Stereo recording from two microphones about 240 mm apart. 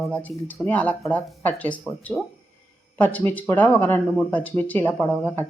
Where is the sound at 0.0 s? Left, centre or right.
Centre.